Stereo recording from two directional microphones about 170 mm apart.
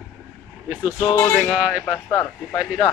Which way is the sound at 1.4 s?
5° right (ahead or behind).